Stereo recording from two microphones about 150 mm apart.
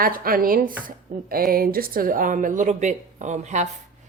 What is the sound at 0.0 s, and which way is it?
A woman's voice, 70° right (ahead or behind).